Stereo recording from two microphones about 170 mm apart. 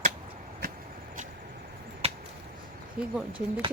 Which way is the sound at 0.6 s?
60° right (ahead or behind).